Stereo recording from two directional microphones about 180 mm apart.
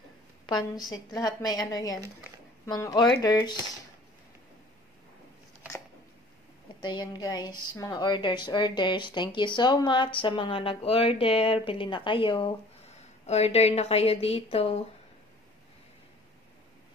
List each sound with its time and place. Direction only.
0.5 s a woman's voice: 20° left (ahead or behind)
6.8 s a woman's voice: 25° left (ahead or behind)